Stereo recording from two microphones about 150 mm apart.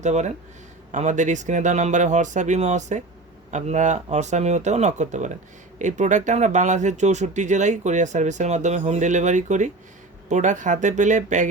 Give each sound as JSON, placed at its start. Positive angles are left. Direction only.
{"t": 0.0, "sound": "speech", "side_deg": -50}